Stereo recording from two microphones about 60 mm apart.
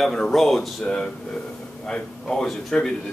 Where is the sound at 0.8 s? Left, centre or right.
Centre.